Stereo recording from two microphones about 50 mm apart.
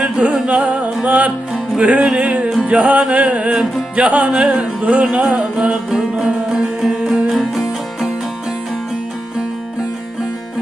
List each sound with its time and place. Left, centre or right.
0.0 s music: right
5.9 s music: centre